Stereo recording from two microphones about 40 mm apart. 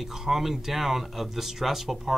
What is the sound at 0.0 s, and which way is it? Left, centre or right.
Speech, centre.